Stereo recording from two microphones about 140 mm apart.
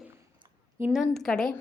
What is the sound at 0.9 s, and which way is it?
Speech, centre (ahead or behind).